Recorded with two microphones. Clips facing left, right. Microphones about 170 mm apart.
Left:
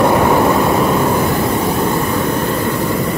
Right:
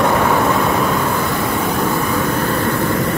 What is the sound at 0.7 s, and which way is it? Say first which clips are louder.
Vehicle: left 3 dB; 10° left (ahead or behind).